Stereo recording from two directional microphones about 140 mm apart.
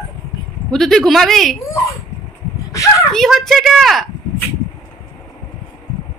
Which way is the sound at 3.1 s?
5° left (ahead or behind).